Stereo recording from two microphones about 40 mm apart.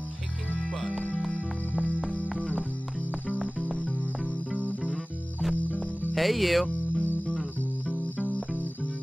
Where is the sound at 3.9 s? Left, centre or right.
Left.